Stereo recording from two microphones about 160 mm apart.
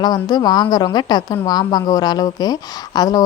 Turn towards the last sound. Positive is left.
turn(degrees=25)  # may be behind; listen again after turning